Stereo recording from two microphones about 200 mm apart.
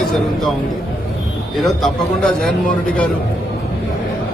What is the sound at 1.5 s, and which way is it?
Speech, centre (ahead or behind).